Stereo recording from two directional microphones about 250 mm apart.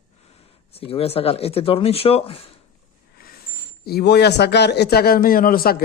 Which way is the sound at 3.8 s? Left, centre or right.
Left.